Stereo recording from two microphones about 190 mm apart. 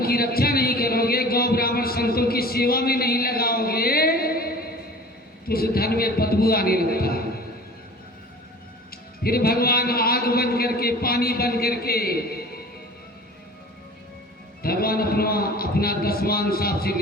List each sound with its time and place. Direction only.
0.0 s a sound: 55° left (ahead or behind)
5.5 s a man's voice: 50° left (ahead or behind)
9.2 s a man's voice: 50° left (ahead or behind)
14.6 s a man's voice: 50° left (ahead or behind)